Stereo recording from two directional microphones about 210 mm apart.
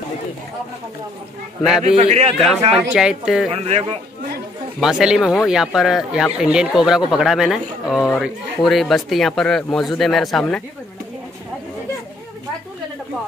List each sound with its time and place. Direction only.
1.6 s speech: centre (ahead or behind)
2.0 s speech: 30° right (ahead or behind)
2.7 s speech: 5° right (ahead or behind)
3.5 s a man's voice: 30° right (ahead or behind)
4.7 s speech: centre (ahead or behind)